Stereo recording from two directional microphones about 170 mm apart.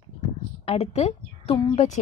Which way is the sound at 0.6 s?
35° left (ahead or behind).